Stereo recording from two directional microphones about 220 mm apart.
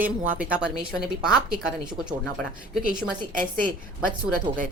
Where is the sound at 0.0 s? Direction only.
5° right (ahead or behind).